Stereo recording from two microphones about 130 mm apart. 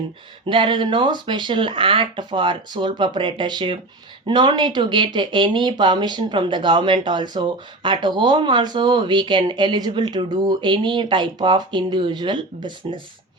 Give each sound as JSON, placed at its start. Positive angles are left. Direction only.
{"t": 0.4, "sound": "speech", "side_deg": -40}